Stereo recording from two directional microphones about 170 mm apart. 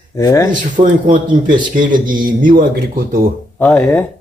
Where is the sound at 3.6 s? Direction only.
5° left (ahead or behind).